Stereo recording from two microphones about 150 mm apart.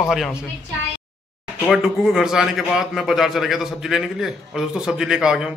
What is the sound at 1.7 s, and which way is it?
A man's voice, centre (ahead or behind).